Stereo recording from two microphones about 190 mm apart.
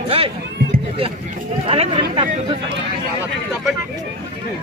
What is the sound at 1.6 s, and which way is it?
Speech, 30° right (ahead or behind).